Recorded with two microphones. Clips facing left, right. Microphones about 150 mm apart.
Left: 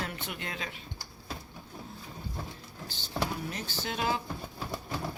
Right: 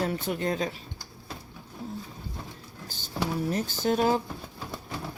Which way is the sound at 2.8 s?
45° right (ahead or behind).